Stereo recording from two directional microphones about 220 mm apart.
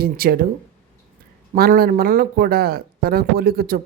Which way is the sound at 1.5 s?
40° right (ahead or behind).